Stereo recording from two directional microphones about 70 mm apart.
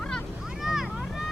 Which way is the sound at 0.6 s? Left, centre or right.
Centre.